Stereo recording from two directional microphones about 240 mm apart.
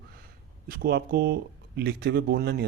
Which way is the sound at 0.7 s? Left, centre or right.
Right.